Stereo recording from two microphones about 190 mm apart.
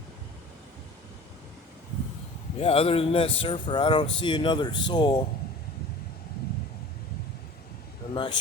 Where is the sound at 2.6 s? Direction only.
30° left (ahead or behind).